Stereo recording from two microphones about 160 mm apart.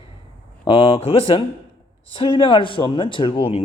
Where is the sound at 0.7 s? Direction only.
35° left (ahead or behind).